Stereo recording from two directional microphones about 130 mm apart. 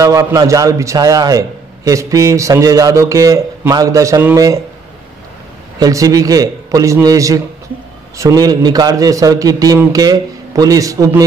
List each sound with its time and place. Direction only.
0.0 s a man's voice: 25° right (ahead or behind)
5.8 s a man's voice: 25° right (ahead or behind)